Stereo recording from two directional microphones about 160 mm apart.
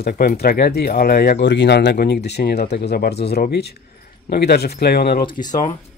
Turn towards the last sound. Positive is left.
turn(degrees=25)  # may be behind; listen again after turning